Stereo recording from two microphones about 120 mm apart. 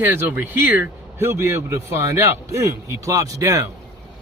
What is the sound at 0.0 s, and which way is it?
A man's voice, 15° right (ahead or behind).